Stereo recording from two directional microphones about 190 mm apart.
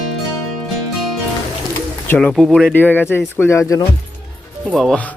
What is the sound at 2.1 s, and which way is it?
Speech, 5° left (ahead or behind).